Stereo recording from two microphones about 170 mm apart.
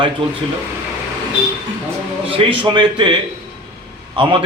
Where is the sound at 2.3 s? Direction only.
30° right (ahead or behind).